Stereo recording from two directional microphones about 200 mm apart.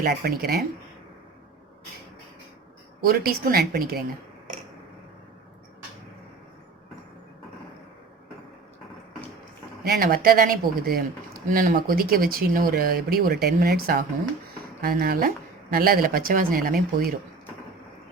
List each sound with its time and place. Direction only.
0.0 s speech: 50° right (ahead or behind)
3.0 s speech: 50° right (ahead or behind)
9.8 s speech: 50° right (ahead or behind)